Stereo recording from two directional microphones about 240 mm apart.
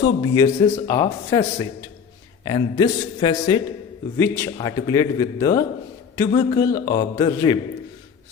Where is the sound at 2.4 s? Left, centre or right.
Centre.